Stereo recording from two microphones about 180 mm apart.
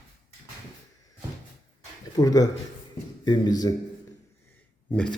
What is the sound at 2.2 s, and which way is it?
Speech, 20° left (ahead or behind).